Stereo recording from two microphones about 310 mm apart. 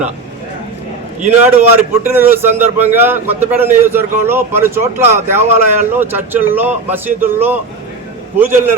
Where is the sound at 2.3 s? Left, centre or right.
Centre.